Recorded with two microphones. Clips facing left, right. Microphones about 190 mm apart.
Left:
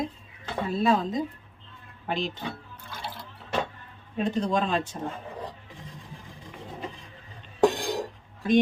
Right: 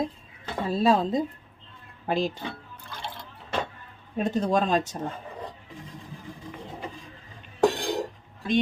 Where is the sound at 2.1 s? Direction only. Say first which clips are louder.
Right 4 dB; 35° right (ahead or behind).